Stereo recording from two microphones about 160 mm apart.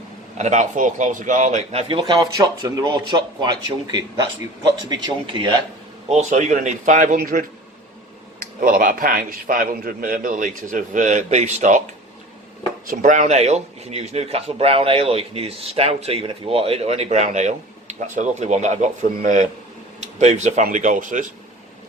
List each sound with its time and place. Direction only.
0.3 s a man's voice: 45° right (ahead or behind)
1.9 s speech: 30° right (ahead or behind)
4.9 s speech: 25° right (ahead or behind)
6.1 s a man's voice: 45° right (ahead or behind)
8.6 s a man's voice: 60° right (ahead or behind)
12.9 s a man's voice: 50° right (ahead or behind)